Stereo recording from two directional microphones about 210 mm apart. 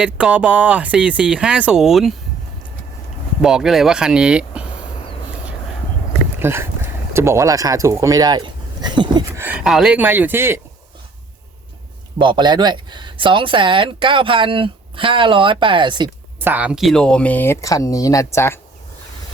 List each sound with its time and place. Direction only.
0.0 s speech: 5° right (ahead or behind)
3.4 s speech: centre (ahead or behind)
6.4 s speech: 10° right (ahead or behind)
9.4 s speech: 5° right (ahead or behind)
12.2 s speech: 20° right (ahead or behind)
16.4 s speech: 10° right (ahead or behind); by 18.6 s 10° left (ahead or behind)